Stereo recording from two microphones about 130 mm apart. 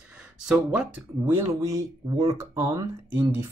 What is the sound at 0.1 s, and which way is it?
Speech, 5° right (ahead or behind).